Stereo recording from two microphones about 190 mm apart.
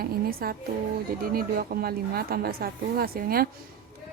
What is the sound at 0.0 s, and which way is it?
A woman's voice, 50° right (ahead or behind).